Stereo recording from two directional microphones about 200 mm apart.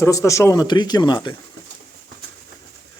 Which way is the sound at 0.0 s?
15° left (ahead or behind).